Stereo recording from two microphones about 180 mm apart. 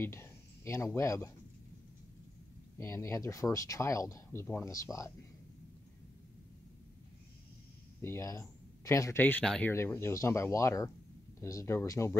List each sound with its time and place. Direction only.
0.0 s a sound: 15° left (ahead or behind)
0.9 s speech: 15° left (ahead or behind)
2.8 s speech: 15° left (ahead or behind)
4.9 s a man's voice: centre (ahead or behind)
8.0 s speech: 15° left (ahead or behind)